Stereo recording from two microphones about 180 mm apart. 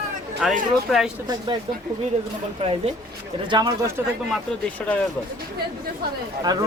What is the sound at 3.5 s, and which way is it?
Speech, 25° right (ahead or behind).